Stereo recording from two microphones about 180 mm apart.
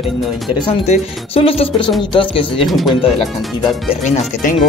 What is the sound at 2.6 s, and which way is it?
Speech, centre (ahead or behind).